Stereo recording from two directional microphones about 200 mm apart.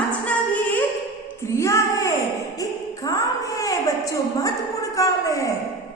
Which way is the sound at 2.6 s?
15° left (ahead or behind).